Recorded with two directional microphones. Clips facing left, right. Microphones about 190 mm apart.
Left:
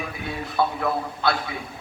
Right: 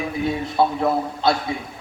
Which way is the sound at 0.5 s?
25° right (ahead or behind).